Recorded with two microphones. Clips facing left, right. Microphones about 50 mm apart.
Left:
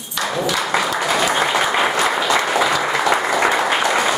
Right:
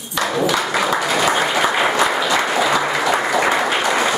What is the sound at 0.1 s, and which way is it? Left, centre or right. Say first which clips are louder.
Applause: right 2 dB; centre.